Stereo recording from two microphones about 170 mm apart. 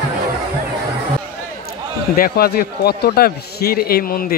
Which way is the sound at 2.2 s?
60° left (ahead or behind).